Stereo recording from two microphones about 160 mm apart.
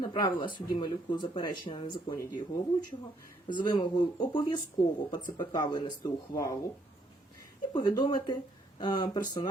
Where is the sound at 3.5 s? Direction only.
30° left (ahead or behind).